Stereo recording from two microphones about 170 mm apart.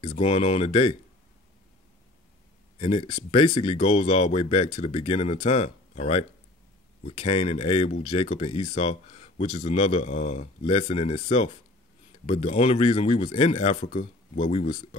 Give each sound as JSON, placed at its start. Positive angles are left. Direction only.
{"t": 0.0, "sound": "speech", "side_deg": 40}
{"t": 2.8, "sound": "speech", "side_deg": 35}